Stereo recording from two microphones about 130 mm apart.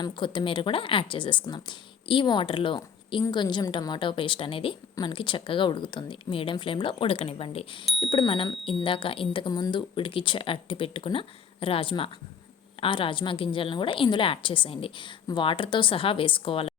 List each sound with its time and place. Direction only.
0.0 s a woman's voice: 35° left (ahead or behind)